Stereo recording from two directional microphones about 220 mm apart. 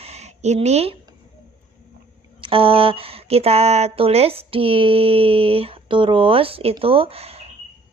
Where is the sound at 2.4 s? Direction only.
25° right (ahead or behind).